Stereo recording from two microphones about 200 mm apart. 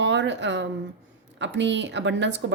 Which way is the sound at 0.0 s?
65° right (ahead or behind).